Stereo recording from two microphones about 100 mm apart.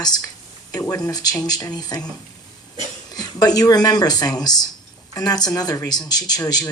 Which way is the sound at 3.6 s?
40° left (ahead or behind).